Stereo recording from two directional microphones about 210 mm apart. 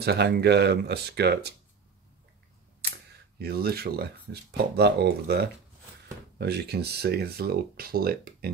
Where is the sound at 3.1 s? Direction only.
50° right (ahead or behind).